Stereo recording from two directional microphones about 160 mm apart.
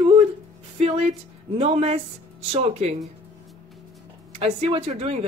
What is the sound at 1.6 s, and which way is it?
Speech, 40° right (ahead or behind).